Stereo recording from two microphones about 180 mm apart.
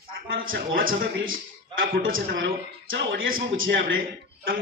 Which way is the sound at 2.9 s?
85° right.